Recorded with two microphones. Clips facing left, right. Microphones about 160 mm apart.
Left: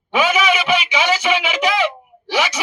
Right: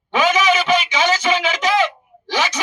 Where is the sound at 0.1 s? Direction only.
10° left (ahead or behind).